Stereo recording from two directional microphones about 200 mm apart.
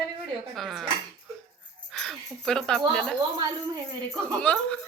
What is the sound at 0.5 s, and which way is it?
Speech, centre (ahead or behind).